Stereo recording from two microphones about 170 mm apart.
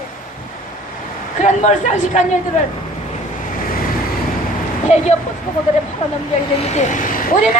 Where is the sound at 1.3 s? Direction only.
45° left (ahead or behind).